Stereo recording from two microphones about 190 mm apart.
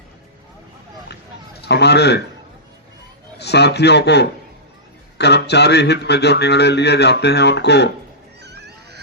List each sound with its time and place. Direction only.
1.6 s a man's voice: 60° left (ahead or behind)
3.3 s a man's voice: 60° left (ahead or behind)
8.4 s a sound: 60° right (ahead or behind)